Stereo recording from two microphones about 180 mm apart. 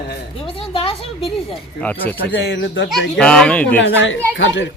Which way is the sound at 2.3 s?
80° left.